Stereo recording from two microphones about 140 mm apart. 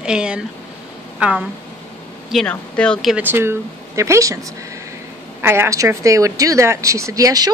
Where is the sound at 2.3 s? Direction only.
5° left (ahead or behind).